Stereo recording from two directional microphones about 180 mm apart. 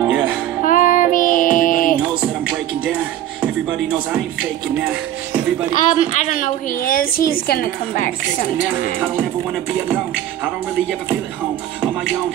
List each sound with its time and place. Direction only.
0.0 s music: 5° right (ahead or behind)
0.7 s child singing: 50° left (ahead or behind)
3.7 s speech: 5° right (ahead or behind)
5.9 s a woman's voice: 40° left (ahead or behind)